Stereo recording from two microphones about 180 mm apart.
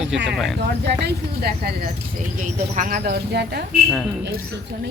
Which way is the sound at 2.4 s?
50° right (ahead or behind).